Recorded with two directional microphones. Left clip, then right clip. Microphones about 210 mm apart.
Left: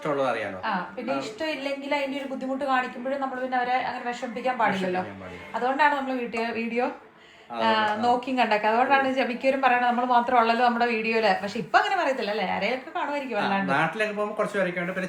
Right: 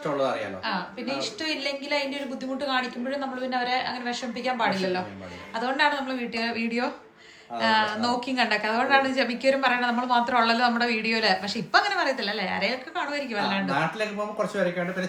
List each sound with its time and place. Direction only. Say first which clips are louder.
0.2 s a woman's voice: left 1 dB; 5° left (ahead or behind)